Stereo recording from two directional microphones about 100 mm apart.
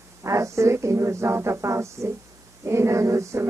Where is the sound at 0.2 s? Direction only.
30° right (ahead or behind).